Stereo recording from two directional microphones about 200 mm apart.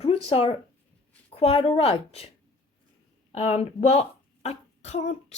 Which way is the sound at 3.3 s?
30° left (ahead or behind).